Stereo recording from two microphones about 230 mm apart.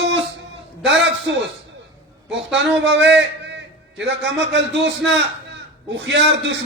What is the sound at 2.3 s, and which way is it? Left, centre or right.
A man's voice, right.